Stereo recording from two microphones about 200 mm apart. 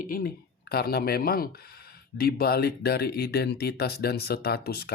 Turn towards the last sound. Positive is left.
turn(degrees=50)  # may be behind; listen again after turning